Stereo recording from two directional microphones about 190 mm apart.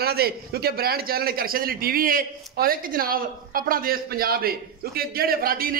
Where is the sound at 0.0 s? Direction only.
55° right (ahead or behind).